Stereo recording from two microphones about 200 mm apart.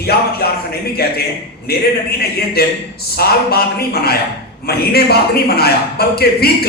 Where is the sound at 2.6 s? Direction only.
50° left (ahead or behind).